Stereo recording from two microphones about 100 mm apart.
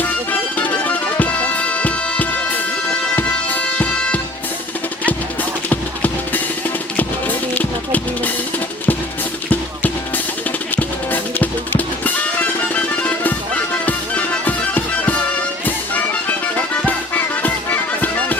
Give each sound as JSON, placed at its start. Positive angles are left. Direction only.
{"t": 0.0, "sound": "music", "side_deg": 15}
{"t": 10.8, "sound": "music", "side_deg": 20}
{"t": 16.6, "sound": "music", "side_deg": 15}